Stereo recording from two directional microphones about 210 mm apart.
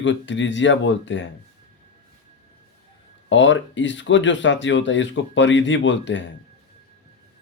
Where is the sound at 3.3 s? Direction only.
60° left (ahead or behind).